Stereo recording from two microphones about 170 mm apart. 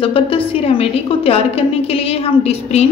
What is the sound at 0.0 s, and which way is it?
A woman's voice, 30° left (ahead or behind).